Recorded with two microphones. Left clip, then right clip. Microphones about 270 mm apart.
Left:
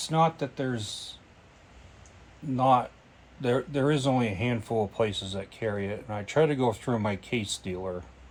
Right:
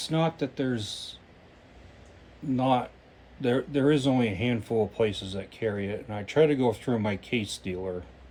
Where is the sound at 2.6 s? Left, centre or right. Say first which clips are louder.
Left 3 dB; centre.